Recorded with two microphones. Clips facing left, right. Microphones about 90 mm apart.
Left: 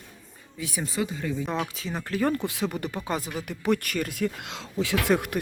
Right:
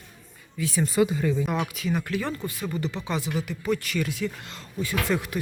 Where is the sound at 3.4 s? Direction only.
60° left (ahead or behind).